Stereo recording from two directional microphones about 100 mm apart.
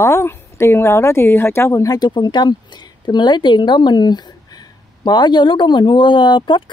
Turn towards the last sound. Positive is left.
turn(degrees=50)  # may be behind; listen again after turning